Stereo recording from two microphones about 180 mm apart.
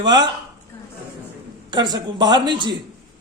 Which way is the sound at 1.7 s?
25° right (ahead or behind).